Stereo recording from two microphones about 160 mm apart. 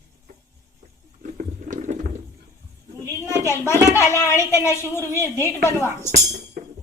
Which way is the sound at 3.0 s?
15° left (ahead or behind).